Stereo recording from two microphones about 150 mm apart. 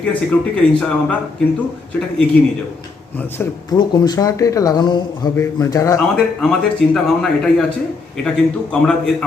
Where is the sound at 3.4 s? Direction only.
10° left (ahead or behind).